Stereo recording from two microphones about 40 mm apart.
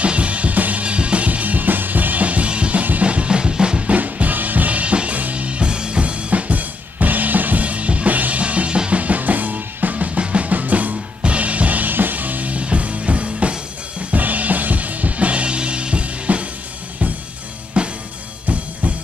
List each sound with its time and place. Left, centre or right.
0.0 s music: right
2.8 s drum kit: right
3.9 s music: right
9.0 s music: right
17.8 s drum: right